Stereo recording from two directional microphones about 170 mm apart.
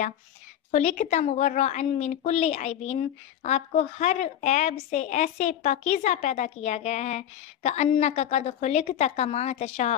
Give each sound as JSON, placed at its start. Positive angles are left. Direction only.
{"t": 0.7, "sound": "a woman's voice", "side_deg": 45}